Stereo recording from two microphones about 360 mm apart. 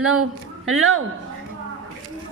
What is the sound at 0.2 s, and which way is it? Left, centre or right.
Speech, right.